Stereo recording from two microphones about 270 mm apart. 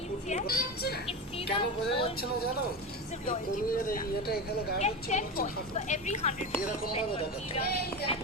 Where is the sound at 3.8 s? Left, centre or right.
Left.